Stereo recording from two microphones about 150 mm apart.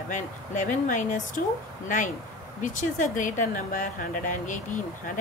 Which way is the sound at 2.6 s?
60° left (ahead or behind).